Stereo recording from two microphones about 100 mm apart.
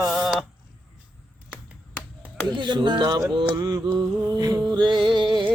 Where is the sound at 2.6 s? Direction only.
50° right (ahead or behind).